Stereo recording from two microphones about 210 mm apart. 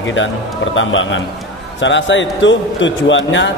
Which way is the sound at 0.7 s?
65° left (ahead or behind).